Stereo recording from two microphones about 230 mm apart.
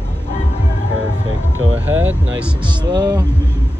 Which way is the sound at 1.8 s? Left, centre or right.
Centre.